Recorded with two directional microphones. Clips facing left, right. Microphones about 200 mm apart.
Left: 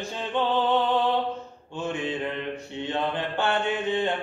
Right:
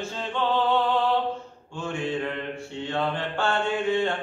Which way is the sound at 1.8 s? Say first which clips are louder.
Even; 20° left (ahead or behind).